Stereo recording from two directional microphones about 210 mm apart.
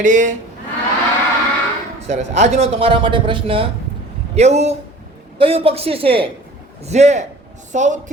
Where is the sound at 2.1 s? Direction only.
30° right (ahead or behind).